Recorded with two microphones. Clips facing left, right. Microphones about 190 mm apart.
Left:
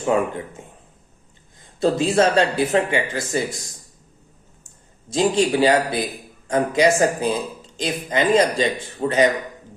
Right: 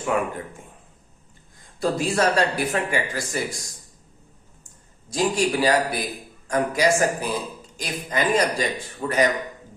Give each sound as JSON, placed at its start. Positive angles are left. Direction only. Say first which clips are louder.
{"t": 0.1, "sound": "speech", "louder": "left 4 dB", "side_deg": 25}
{"t": 1.8, "sound": "speech", "louder": "left 4 dB", "side_deg": 25}
{"t": 4.6, "sound": "speech", "louder": "left 6 dB", "side_deg": 25}